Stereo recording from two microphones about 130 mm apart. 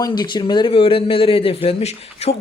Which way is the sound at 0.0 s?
35° left (ahead or behind).